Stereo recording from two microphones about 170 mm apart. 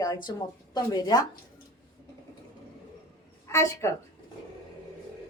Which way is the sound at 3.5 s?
15° left (ahead or behind).